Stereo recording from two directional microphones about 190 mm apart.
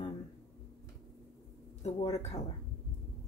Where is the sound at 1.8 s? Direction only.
35° left (ahead or behind).